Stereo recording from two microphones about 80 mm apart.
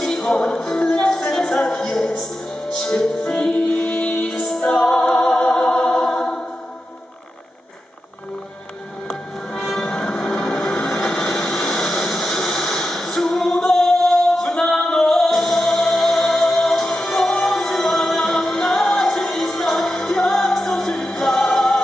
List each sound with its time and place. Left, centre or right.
0.0 s music: centre
9.0 s music: centre